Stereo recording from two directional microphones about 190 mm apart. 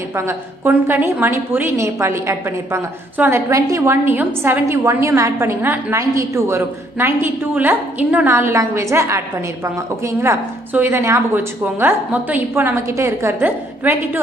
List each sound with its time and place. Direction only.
0.1 s a woman's voice: 15° right (ahead or behind)